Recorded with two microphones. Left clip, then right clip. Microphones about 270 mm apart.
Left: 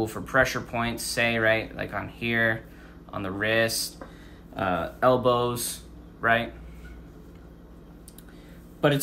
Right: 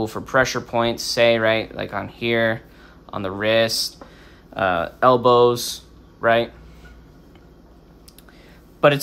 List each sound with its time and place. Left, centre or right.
0.0 s speech: centre
8.8 s speech: right